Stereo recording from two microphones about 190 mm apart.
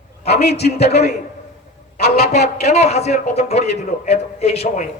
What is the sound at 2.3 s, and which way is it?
A man's voice, 35° left (ahead or behind).